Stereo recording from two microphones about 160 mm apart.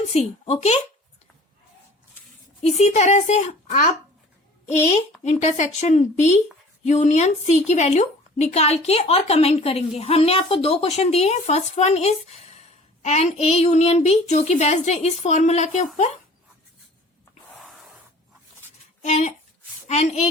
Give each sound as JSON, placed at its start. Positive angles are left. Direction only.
{"t": 0.1, "sound": "a woman's voice", "side_deg": 40}
{"t": 2.6, "sound": "a child's voice", "side_deg": 45}
{"t": 5.2, "sound": "a child's voice", "side_deg": 45}
{"t": 17.5, "sound": "a sound", "side_deg": 0}
{"t": 19.0, "sound": "a child's voice", "side_deg": 45}